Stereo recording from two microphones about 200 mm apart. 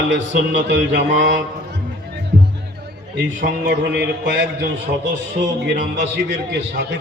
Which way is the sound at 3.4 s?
55° right (ahead or behind).